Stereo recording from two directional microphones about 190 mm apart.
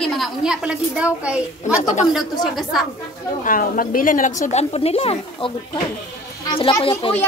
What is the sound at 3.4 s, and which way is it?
Speech, 45° left (ahead or behind).